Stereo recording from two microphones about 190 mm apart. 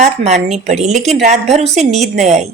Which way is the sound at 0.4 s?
40° right (ahead or behind).